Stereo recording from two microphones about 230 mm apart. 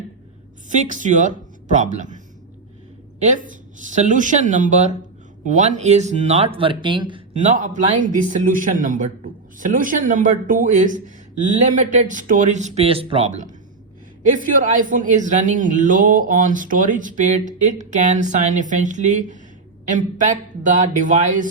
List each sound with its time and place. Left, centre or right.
0.7 s speech: right